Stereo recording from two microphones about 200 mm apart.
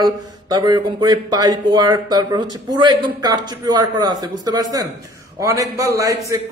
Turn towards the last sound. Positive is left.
turn(degrees=-15)  # may be behind; listen again after turning